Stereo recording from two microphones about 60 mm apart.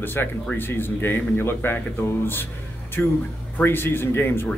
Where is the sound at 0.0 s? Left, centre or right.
Left.